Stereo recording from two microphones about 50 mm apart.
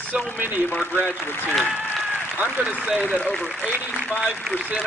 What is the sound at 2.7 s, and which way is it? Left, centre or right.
Speech, right.